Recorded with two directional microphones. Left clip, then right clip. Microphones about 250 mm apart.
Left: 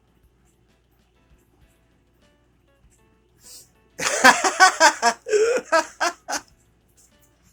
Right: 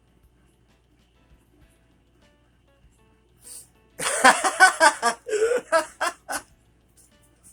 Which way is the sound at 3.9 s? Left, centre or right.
Centre.